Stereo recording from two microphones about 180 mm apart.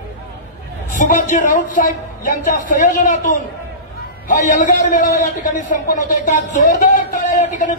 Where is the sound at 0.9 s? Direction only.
45° left (ahead or behind).